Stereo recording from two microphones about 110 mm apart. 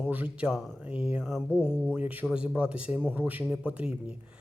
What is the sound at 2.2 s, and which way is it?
Speech, 10° right (ahead or behind).